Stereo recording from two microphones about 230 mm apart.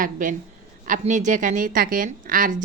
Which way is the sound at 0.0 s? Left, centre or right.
Right.